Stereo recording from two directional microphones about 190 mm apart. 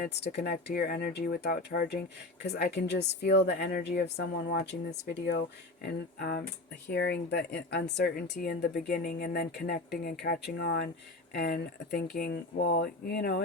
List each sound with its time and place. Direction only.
0.0 s speech: 60° left (ahead or behind)